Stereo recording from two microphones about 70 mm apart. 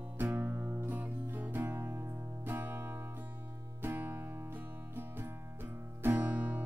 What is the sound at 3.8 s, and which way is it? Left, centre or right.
Music, right.